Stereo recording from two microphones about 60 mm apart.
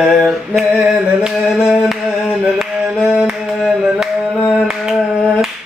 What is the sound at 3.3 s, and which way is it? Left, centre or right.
Music, centre.